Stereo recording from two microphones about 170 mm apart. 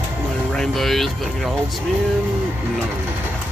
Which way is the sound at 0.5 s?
Centre (ahead or behind).